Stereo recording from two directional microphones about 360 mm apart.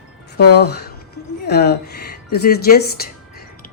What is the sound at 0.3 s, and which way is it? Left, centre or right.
Speech, left.